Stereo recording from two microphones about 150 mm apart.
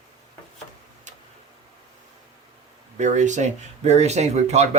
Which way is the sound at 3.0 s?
55° right (ahead or behind).